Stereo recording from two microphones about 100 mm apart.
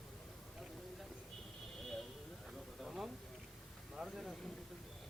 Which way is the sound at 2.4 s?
Centre (ahead or behind).